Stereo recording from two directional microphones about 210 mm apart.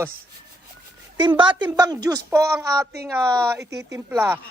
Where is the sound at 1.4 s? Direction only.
20° right (ahead or behind).